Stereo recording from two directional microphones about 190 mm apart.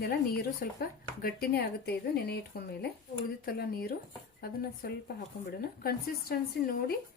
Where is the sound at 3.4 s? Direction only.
50° left (ahead or behind).